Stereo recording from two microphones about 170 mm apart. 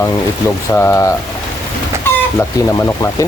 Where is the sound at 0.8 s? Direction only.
15° left (ahead or behind).